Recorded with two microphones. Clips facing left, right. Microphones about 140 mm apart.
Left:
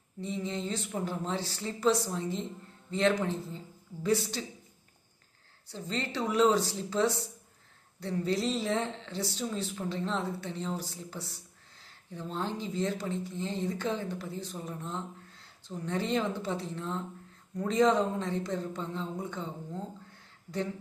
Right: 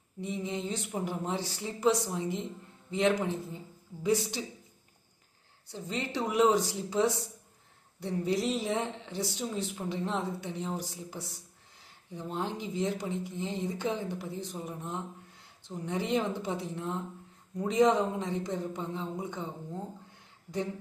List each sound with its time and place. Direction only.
0.2 s speech: 15° right (ahead or behind)
5.7 s speech: 15° right (ahead or behind)